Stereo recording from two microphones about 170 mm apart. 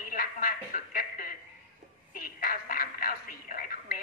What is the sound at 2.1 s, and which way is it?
Telephone, 55° left (ahead or behind).